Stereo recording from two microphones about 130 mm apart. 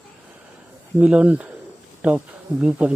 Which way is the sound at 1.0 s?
10° right (ahead or behind).